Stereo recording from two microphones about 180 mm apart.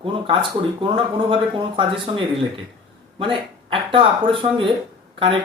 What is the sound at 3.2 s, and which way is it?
Speech, 30° right (ahead or behind).